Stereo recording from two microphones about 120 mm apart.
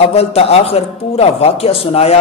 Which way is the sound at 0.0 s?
55° left (ahead or behind).